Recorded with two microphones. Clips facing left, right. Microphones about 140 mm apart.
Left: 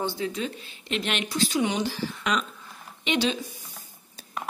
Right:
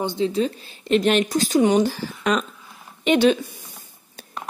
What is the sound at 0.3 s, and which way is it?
Speech, 40° right (ahead or behind).